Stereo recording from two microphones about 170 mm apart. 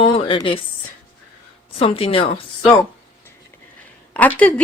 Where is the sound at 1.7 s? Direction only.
35° left (ahead or behind).